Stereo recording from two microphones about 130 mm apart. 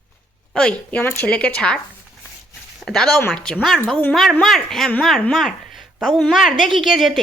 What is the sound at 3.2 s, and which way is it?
Speech, 15° left (ahead or behind).